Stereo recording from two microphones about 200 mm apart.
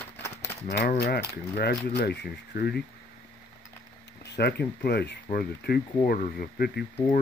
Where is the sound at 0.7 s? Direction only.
55° left (ahead or behind).